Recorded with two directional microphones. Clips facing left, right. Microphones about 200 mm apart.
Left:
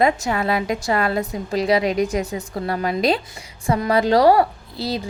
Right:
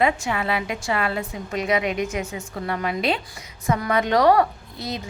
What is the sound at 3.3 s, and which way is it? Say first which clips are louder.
A woman's voice: left 3 dB; 25° left (ahead or behind).